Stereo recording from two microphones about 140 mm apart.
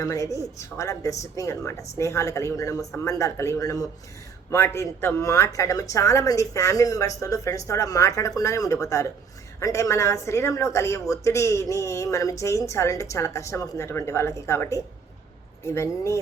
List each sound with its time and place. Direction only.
0.0 s speech: 20° left (ahead or behind)